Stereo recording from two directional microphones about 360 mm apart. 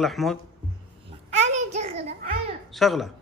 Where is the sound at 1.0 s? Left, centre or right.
Centre.